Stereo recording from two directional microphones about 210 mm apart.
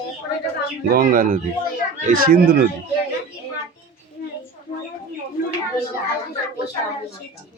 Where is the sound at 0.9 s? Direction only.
40° right (ahead or behind).